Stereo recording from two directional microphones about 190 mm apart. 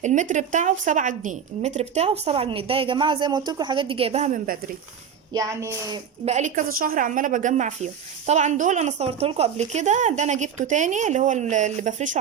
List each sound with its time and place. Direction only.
0.0 s a woman's voice: 40° right (ahead or behind)
5.3 s a woman's voice: 20° right (ahead or behind)
6.2 s a woman's voice: 40° right (ahead or behind)